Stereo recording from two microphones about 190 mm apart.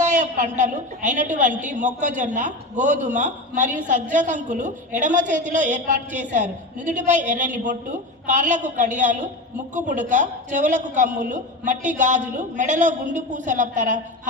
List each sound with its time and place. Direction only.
0.0 s a woman's voice: 40° right (ahead or behind)